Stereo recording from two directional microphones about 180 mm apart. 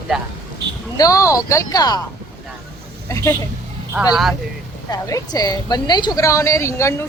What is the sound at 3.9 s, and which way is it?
Speech, 5° right (ahead or behind).